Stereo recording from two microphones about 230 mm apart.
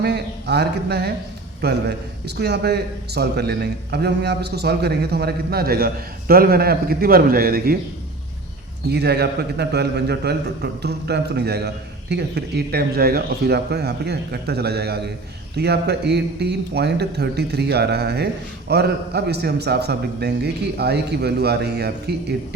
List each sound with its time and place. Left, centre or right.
0.0 s a man's voice: right
8.9 s a man's voice: right